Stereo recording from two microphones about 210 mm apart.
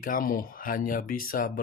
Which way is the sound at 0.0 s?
45° left (ahead or behind).